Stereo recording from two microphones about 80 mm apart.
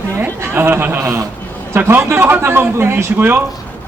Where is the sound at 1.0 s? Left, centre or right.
Right.